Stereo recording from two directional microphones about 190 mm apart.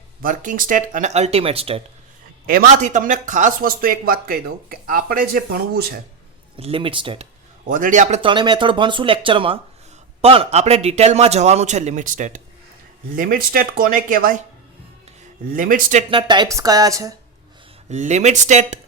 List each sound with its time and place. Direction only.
0.2 s a man's voice: 45° right (ahead or behind); by 1.8 s 30° right (ahead or behind)
2.5 s speech: 45° right (ahead or behind)
6.6 s speech: 30° right (ahead or behind)
7.7 s a man's voice: 45° right (ahead or behind)
15.4 s speech: 45° right (ahead or behind)
16.0 s speech: 25° right (ahead or behind)
17.8 s a man's voice: 40° right (ahead or behind)